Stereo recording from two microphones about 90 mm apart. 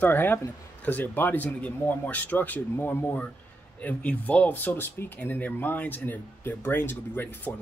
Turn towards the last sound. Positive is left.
turn(degrees=25)  # may be behind; listen again after turning